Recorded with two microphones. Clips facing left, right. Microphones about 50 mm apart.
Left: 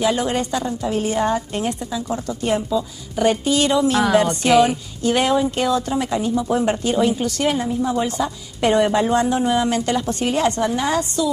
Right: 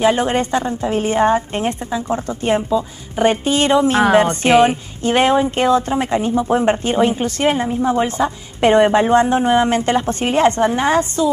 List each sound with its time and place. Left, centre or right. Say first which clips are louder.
0.0 s a woman's voice: right 4 dB; right